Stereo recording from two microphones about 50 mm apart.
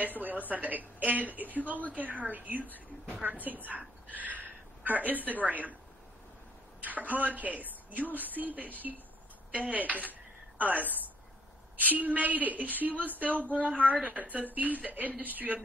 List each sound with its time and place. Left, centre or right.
0.0 s a sound: right
0.5 s a woman's voice: right
6.8 s a woman's voice: right